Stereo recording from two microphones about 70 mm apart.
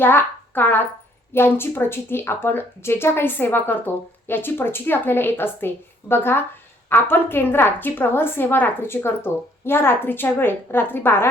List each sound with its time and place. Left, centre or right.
0.0 s speech: left